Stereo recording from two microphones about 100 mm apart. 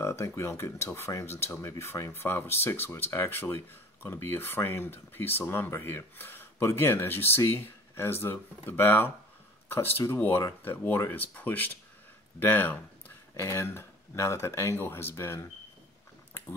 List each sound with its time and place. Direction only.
0.0 s speech: 25° left (ahead or behind)